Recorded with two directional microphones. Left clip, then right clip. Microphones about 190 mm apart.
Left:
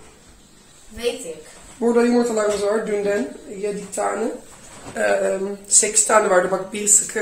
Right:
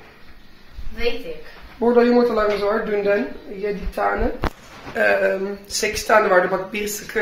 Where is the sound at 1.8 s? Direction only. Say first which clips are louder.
Right 2 dB; 15° right (ahead or behind).